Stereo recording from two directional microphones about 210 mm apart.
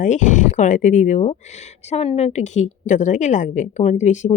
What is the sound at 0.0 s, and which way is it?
Speech, 35° left (ahead or behind).